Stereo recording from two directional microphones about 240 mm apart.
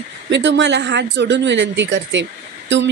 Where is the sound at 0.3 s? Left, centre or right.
Right.